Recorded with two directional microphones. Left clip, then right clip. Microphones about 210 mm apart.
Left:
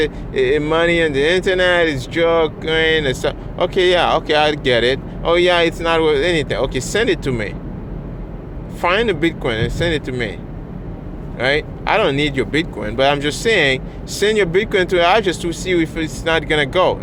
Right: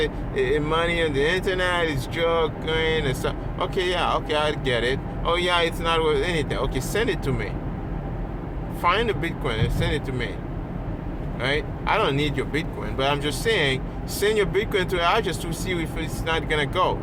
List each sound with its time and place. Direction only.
0.0 s speech: 40° left (ahead or behind)
8.8 s speech: 40° left (ahead or behind)
11.3 s speech: 40° left (ahead or behind)